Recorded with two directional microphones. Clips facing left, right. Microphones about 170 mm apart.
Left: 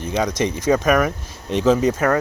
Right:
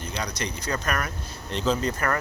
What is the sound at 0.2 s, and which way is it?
Speech, 90° left.